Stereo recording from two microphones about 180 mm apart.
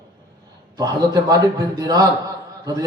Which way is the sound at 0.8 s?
20° right (ahead or behind).